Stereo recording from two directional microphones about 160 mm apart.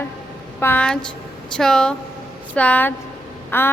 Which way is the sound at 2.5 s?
10° left (ahead or behind).